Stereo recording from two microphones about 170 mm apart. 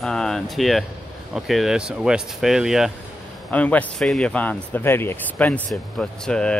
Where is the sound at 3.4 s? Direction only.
10° left (ahead or behind).